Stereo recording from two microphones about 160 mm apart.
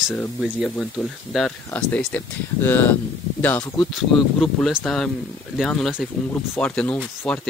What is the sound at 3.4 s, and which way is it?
Speech, 10° left (ahead or behind).